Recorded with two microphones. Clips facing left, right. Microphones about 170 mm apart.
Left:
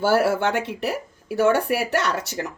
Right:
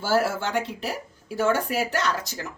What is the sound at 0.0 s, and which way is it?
Speech, 60° left (ahead or behind).